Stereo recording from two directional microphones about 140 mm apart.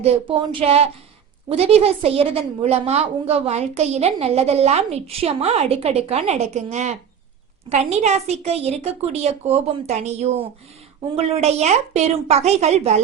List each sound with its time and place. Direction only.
0.0 s a woman's voice: 40° right (ahead or behind)